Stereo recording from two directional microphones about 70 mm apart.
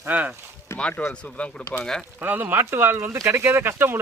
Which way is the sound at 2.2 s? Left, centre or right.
Right.